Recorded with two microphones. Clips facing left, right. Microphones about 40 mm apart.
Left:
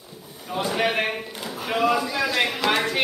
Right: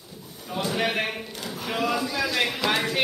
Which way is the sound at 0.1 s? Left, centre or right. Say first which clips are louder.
Left 3 dB; centre.